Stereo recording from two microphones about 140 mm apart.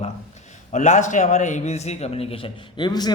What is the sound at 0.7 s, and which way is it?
A man's voice, 60° left (ahead or behind).